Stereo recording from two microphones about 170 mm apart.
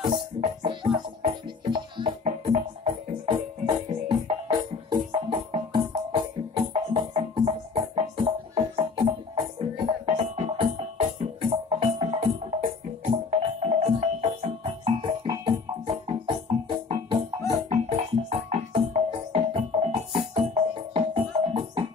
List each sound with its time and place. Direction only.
0.1 s music: 35° right (ahead or behind)
2.2 s music: 45° right (ahead or behind)
18.5 s music: 40° right (ahead or behind)